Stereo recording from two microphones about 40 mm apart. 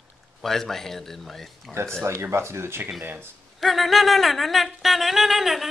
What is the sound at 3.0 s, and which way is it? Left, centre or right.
Speech, right.